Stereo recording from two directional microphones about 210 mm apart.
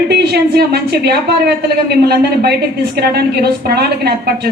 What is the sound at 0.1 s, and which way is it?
A woman's voice, 50° right (ahead or behind).